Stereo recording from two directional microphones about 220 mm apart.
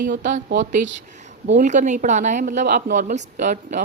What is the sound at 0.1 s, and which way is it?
A woman's voice, 35° right (ahead or behind).